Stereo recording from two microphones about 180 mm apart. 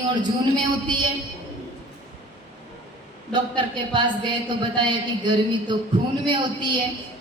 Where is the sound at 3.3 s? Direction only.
25° right (ahead or behind).